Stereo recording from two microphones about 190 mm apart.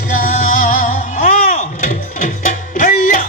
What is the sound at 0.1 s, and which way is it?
Music, 45° left (ahead or behind).